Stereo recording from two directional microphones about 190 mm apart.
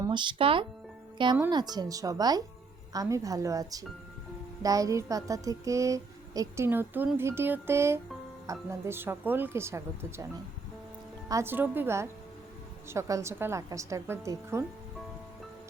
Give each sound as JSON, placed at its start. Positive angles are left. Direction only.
{"t": 0.0, "sound": "speech", "side_deg": -25}
{"t": 11.3, "sound": "speech", "side_deg": -15}